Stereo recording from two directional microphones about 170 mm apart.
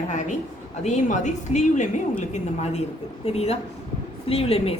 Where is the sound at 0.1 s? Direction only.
45° left (ahead or behind).